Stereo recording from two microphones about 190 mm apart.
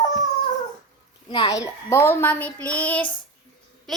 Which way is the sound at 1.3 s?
20° left (ahead or behind).